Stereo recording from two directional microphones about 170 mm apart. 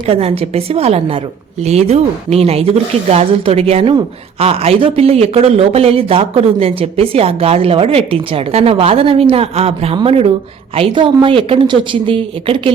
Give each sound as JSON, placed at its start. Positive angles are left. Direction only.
{"t": 0.0, "sound": "a woman's voice", "side_deg": -35}